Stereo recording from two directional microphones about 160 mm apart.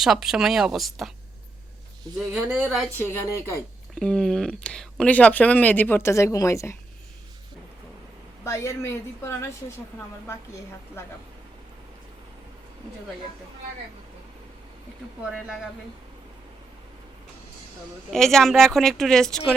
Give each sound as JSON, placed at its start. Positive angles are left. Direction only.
{"t": 0.0, "sound": "speech", "side_deg": 0}
{"t": 2.1, "sound": "speech", "side_deg": -10}
{"t": 3.0, "sound": "speech", "side_deg": 15}
{"t": 3.9, "sound": "speech", "side_deg": 5}
{"t": 8.4, "sound": "speech", "side_deg": 15}
{"t": 18.1, "sound": "speech", "side_deg": 5}